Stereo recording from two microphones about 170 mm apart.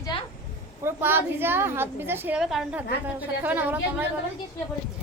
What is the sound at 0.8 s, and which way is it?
A woman's voice, 10° right (ahead or behind).